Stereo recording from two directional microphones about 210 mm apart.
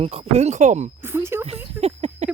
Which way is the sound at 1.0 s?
10° right (ahead or behind).